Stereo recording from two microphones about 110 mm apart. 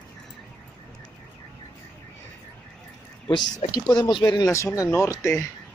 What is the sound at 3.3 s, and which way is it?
Speech, 35° left (ahead or behind).